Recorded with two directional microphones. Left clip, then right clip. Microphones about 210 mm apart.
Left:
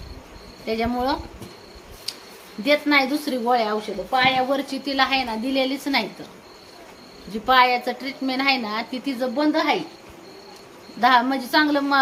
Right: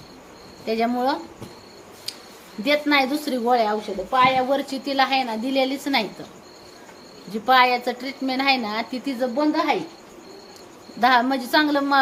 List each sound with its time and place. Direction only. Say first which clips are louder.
0.6 s speech: right 2 dB; 5° right (ahead or behind)
2.1 s a sound: left 1 dB; 5° right (ahead or behind)
2.6 s a woman's voice: left 1 dB; 5° right (ahead or behind)
7.4 s a woman's voice: even; 10° right (ahead or behind)
11.0 s a woman's voice: even; 10° right (ahead or behind)